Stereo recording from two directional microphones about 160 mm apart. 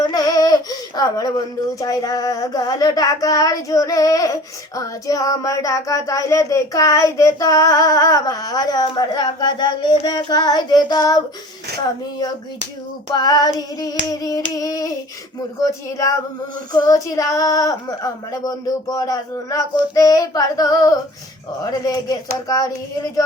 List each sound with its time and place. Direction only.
0.0 s music: 25° left (ahead or behind)
1.8 s child singing: 20° left (ahead or behind)
13.1 s child singing: 25° left (ahead or behind)
16.7 s child singing: 20° left (ahead or behind)